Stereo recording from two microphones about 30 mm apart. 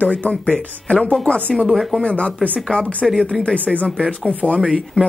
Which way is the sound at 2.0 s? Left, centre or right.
Left.